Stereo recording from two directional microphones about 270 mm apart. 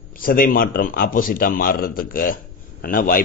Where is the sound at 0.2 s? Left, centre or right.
Left.